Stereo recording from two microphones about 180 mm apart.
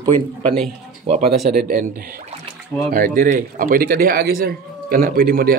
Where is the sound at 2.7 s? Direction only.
15° left (ahead or behind).